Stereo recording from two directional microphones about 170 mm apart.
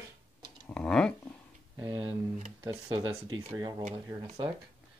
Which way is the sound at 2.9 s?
30° right (ahead or behind).